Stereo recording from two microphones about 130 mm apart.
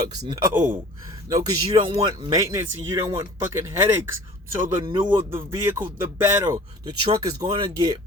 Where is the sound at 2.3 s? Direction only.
20° right (ahead or behind).